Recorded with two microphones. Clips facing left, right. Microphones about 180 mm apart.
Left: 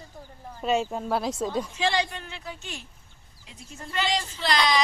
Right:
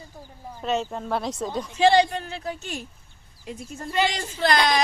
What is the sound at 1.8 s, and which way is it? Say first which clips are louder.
Speech: right 13 dB; 35° right (ahead or behind).